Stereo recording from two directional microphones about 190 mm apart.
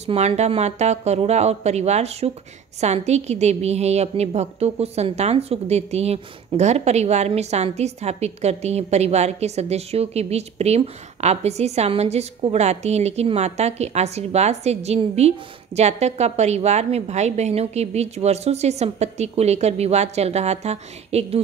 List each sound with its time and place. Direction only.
0.0 s a woman's voice: 35° right (ahead or behind)